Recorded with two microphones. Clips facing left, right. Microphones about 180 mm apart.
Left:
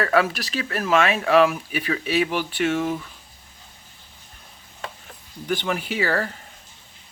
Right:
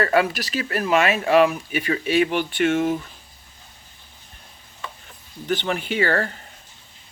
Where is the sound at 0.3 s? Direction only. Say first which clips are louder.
Right 2 dB; centre (ahead or behind).